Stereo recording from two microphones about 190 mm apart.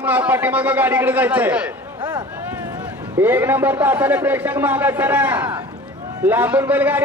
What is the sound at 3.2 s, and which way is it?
A man's voice, 10° right (ahead or behind).